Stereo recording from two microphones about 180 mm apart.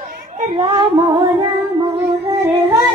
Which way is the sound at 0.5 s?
20° right (ahead or behind).